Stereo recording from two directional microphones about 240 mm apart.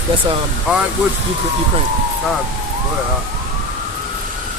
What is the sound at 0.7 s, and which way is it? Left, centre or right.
Speech, centre.